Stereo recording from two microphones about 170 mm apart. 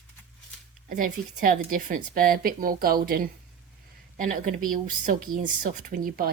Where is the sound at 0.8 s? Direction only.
55° right (ahead or behind).